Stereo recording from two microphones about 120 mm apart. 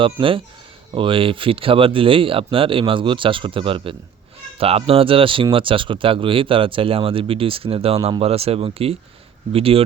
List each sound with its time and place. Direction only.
0.0 s speech: 45° right (ahead or behind)